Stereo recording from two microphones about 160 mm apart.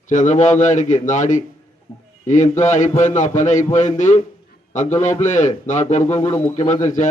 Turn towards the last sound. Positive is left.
turn(degrees=50)  # may be behind; listen again after turning